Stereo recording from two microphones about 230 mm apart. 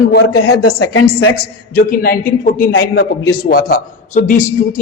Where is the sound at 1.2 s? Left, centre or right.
Left.